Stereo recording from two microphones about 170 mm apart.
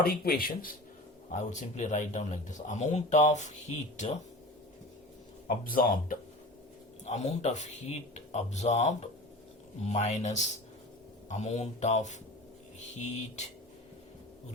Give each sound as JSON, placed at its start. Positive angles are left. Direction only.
{"t": 0.0, "sound": "speech", "side_deg": 60}
{"t": 1.3, "sound": "speech", "side_deg": 45}
{"t": 5.6, "sound": "speech", "side_deg": 55}
{"t": 7.0, "sound": "speech", "side_deg": 40}